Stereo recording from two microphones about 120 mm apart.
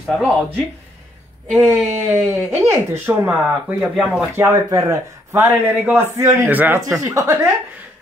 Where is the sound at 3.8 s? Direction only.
5° right (ahead or behind).